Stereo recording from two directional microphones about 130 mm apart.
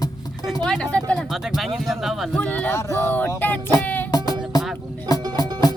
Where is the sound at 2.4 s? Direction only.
10° left (ahead or behind).